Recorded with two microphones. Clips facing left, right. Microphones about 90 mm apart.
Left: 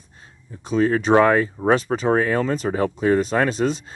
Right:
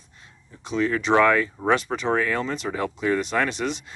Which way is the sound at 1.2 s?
30° left (ahead or behind).